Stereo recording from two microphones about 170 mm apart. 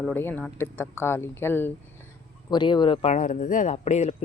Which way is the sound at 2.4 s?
25° left (ahead or behind).